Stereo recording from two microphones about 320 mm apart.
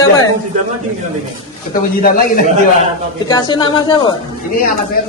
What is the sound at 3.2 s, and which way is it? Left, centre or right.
Speech, centre.